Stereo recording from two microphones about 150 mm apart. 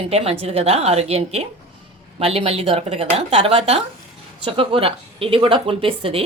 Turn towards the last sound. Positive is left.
turn(degrees=-40)  # may be behind; listen again after turning